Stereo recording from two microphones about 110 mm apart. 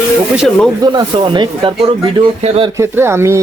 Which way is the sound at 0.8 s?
40° right (ahead or behind).